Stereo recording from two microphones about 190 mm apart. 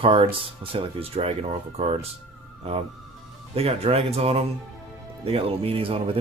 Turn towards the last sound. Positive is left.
turn(degrees=-30)  # may be behind; listen again after turning